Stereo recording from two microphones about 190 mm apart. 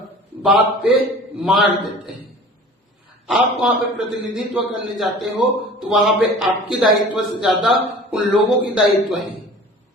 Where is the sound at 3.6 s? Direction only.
5° right (ahead or behind).